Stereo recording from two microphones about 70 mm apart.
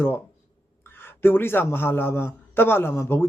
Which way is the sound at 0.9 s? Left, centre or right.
Left.